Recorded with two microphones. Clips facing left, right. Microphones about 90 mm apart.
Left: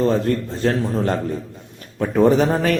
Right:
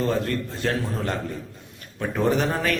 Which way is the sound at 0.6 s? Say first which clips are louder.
Left 7 dB; 35° left (ahead or behind).